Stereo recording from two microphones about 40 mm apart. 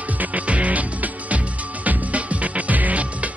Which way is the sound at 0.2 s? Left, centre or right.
Right.